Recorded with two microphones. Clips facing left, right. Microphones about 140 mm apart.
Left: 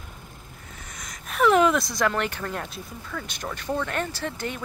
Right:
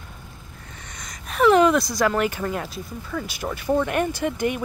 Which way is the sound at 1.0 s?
Centre (ahead or behind).